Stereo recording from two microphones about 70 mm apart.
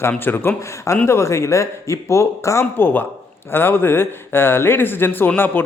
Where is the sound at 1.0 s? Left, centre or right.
Left.